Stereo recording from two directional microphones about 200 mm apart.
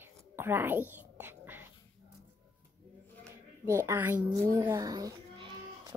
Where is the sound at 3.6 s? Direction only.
15° right (ahead or behind).